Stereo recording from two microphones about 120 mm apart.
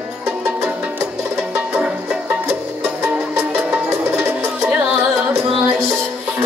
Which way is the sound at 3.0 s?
15° right (ahead or behind).